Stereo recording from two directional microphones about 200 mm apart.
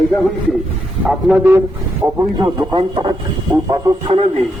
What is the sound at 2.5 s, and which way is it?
Speech, 20° right (ahead or behind).